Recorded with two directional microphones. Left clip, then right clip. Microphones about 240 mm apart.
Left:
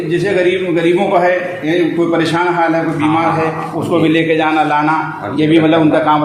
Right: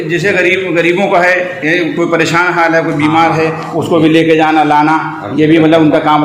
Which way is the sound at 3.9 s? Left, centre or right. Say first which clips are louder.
Right 4 dB; right.